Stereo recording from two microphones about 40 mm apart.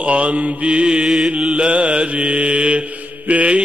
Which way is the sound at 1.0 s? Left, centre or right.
Centre.